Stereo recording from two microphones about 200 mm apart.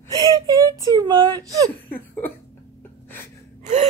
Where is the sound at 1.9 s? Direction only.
10° left (ahead or behind).